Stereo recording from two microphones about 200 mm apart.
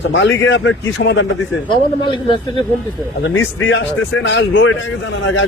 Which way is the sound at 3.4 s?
70° left (ahead or behind).